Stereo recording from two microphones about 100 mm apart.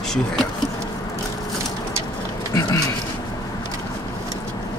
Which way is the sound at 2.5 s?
40° left (ahead or behind).